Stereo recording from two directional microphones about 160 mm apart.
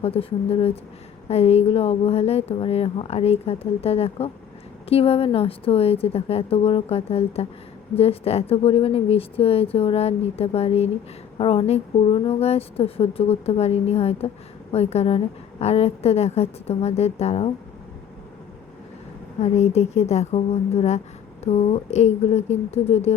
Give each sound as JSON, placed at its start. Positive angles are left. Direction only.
{"t": 0.0, "sound": "speech", "side_deg": 35}
{"t": 19.4, "sound": "speech", "side_deg": 45}